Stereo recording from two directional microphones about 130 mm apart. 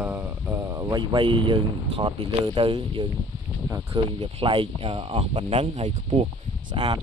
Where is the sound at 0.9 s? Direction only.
40° right (ahead or behind).